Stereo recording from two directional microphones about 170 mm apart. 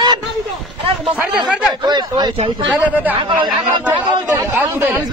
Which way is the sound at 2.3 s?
35° right (ahead or behind).